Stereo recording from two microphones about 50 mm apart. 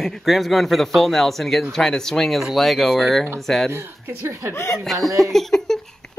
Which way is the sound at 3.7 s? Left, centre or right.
Right.